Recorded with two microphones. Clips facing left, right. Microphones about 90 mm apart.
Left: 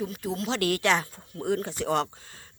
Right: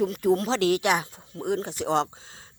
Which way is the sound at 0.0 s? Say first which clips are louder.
Right 9 dB; 55° right (ahead or behind).